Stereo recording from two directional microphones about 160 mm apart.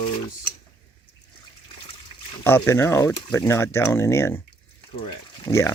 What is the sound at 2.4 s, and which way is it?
Speech, 15° left (ahead or behind).